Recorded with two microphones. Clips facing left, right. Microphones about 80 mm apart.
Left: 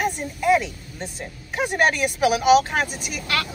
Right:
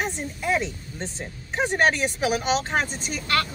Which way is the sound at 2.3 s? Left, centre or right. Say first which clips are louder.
Left 9 dB; centre.